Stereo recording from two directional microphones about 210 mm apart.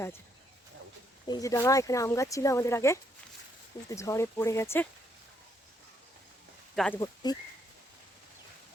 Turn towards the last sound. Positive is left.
turn(degrees=20)  # may be behind; listen again after turning